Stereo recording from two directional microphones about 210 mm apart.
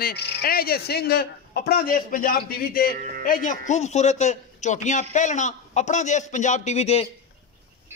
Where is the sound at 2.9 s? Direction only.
40° right (ahead or behind).